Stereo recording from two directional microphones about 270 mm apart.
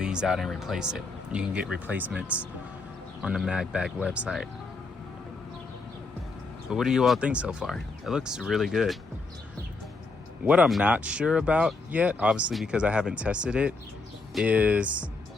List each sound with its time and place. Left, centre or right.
0.0 s speech: centre
6.7 s speech: centre
10.4 s speech: centre